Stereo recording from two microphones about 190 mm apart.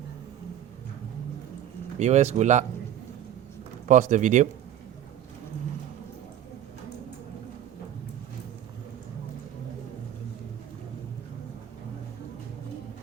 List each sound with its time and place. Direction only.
2.0 s speech: 35° right (ahead or behind)
3.8 s speech: 40° right (ahead or behind)